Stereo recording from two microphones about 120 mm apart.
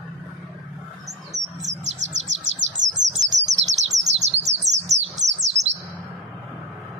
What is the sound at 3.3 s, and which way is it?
Bird, 75° right (ahead or behind).